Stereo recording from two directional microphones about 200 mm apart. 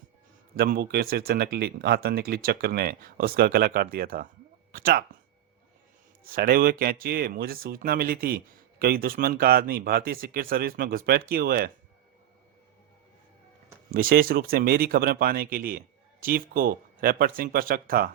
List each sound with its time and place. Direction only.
0.5 s speech: 50° right (ahead or behind)
4.7 s a sound: 45° right (ahead or behind)
6.2 s speech: 50° right (ahead or behind)
13.9 s speech: 45° right (ahead or behind)